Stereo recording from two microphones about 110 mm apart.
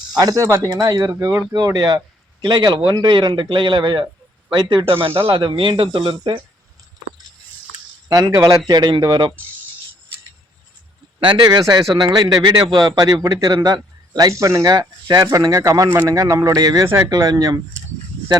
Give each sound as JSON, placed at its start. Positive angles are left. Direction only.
{"t": 0.1, "sound": "speech", "side_deg": -35}
{"t": 0.7, "sound": "speech", "side_deg": -40}
{"t": 1.5, "sound": "a man's voice", "side_deg": -35}
{"t": 8.1, "sound": "speech", "side_deg": -30}
{"t": 11.2, "sound": "speech", "side_deg": -40}